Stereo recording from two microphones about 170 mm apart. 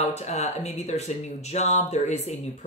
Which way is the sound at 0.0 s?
40° left (ahead or behind).